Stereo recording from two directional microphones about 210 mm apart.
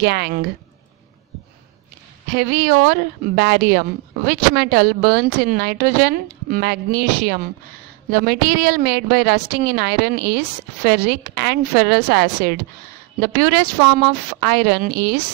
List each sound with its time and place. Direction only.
0.0 s a woman's voice: 50° right (ahead or behind)
2.3 s a woman's voice: 50° right (ahead or behind)